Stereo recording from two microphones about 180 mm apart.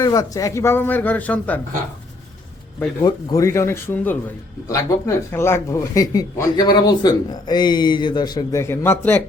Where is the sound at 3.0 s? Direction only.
20° left (ahead or behind).